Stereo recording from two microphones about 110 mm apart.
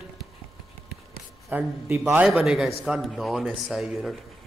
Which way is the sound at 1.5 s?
15° right (ahead or behind).